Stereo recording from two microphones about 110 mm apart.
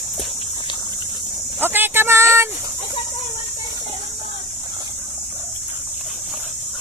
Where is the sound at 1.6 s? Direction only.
20° right (ahead or behind).